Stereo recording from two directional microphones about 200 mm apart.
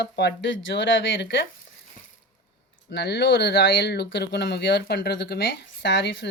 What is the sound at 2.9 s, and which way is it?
Speech, 55° left (ahead or behind).